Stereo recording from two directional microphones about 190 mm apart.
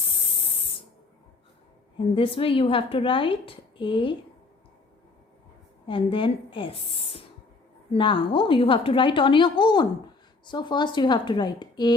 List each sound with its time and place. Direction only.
2.1 s a woman's voice: 30° left (ahead or behind)
5.9 s a woman's voice: 25° left (ahead or behind)